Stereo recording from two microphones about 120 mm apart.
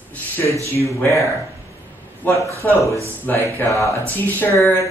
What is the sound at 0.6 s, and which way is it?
Speech, 25° left (ahead or behind).